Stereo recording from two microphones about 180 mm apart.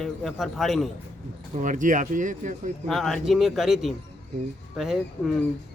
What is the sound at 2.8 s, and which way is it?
Speech, centre (ahead or behind).